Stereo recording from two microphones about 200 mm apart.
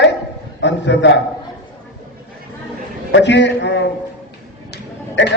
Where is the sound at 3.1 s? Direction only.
60° left (ahead or behind).